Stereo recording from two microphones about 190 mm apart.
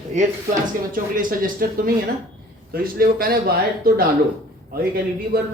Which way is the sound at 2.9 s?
50° right (ahead or behind).